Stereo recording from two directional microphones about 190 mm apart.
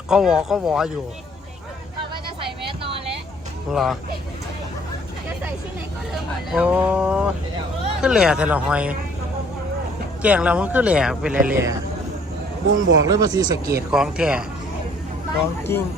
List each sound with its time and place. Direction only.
0.1 s speech: 5° right (ahead or behind)
2.4 s a sound: 30° right (ahead or behind)
3.7 s speech: centre (ahead or behind)
6.5 s speech: 5° right (ahead or behind)
10.2 s speech: 5° right (ahead or behind)
12.7 s speech: 90° right
13.1 s speech: 20° right (ahead or behind)
13.9 s speech: 5° right (ahead or behind)
15.7 s speech: 15° left (ahead or behind)